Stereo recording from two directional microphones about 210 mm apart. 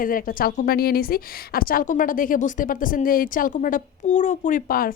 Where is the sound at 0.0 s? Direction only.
40° left (ahead or behind).